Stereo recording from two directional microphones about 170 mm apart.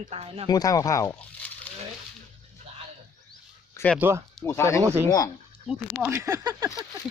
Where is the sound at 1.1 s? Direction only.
10° left (ahead or behind).